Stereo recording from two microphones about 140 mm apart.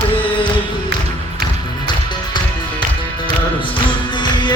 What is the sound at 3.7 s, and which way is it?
Music, 35° left (ahead or behind).